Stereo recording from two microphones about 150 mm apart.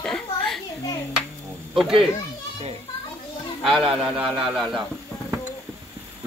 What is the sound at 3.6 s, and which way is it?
Speech, centre (ahead or behind).